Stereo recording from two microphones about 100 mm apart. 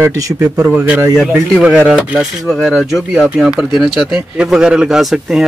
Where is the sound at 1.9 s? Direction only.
10° right (ahead or behind).